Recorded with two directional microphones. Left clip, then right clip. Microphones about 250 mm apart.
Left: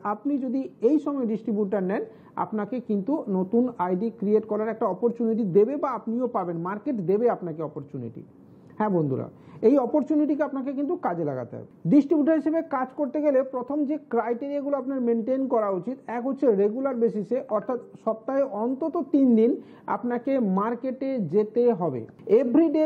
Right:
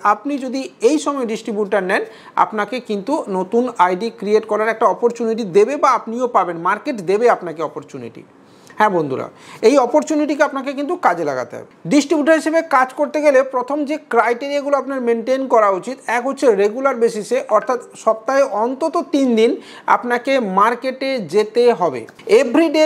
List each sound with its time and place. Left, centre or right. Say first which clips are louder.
0.0 s a woman's voice: right 11 dB; centre
9.0 s a woman's voice: right 7 dB; centre
11.9 s a woman's voice: right 7 dB; centre
17.5 s a woman's voice: right 11 dB; centre
18.8 s a woman's voice: right 7 dB; centre